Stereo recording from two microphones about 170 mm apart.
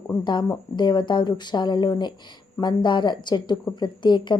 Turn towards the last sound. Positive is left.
turn(degrees=25)  # may be behind; listen again after turning